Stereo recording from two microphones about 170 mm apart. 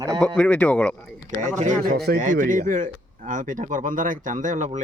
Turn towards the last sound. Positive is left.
turn(degrees=-45)  # may be behind; listen again after turning